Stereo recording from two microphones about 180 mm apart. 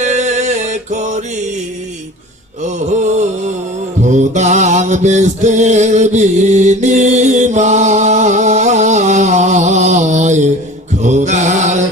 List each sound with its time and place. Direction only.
0.0 s music: 40° right (ahead or behind)
2.6 s mantra: 40° right (ahead or behind)